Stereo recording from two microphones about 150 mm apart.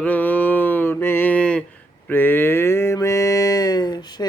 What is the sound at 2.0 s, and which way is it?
Mantra, 15° left (ahead or behind).